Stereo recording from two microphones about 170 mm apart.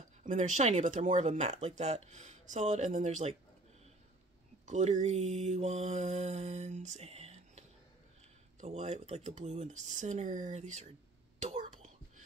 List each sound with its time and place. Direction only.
0.2 s speech: 45° right (ahead or behind)
4.6 s mantra: 45° right (ahead or behind)
8.5 s speech: 40° right (ahead or behind)
11.4 s whispering: 40° right (ahead or behind)